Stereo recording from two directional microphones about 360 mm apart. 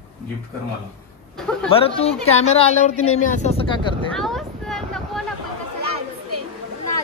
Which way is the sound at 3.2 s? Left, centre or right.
Centre.